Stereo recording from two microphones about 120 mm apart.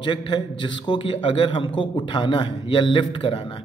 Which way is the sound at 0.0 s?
45° left (ahead or behind).